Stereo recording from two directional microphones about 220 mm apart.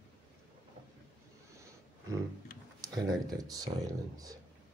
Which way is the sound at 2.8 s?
15° right (ahead or behind).